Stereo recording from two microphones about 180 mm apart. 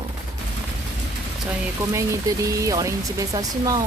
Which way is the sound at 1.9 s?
15° right (ahead or behind).